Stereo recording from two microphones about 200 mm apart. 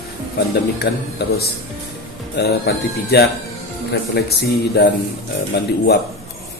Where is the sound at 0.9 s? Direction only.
55° left (ahead or behind).